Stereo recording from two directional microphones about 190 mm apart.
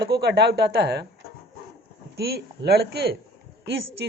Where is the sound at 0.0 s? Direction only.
60° right (ahead or behind).